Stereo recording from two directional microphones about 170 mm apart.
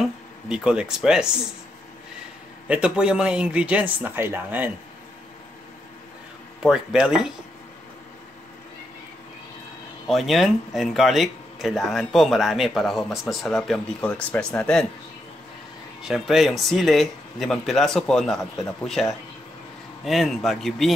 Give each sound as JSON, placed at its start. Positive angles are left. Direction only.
{"t": 0.5, "sound": "speech", "side_deg": -5}
{"t": 2.7, "sound": "speech", "side_deg": -5}
{"t": 6.6, "sound": "speech", "side_deg": -5}
{"t": 10.0, "sound": "speech", "side_deg": 0}
{"t": 16.0, "sound": "speech", "side_deg": 0}
{"t": 20.1, "sound": "speech", "side_deg": 0}